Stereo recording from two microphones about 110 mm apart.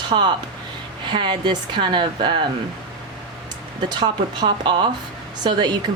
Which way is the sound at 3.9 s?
45° right (ahead or behind).